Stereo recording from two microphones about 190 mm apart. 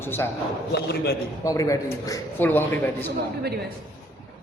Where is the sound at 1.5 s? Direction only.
15° left (ahead or behind).